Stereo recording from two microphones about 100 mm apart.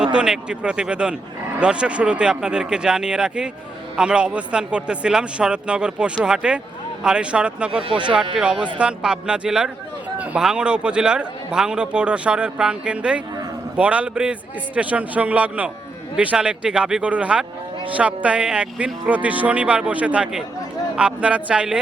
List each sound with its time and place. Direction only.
0.0 s a man's voice: 10° right (ahead or behind)
7.9 s speech: 50° right (ahead or behind)
8.1 s a man's voice: 5° right (ahead or behind)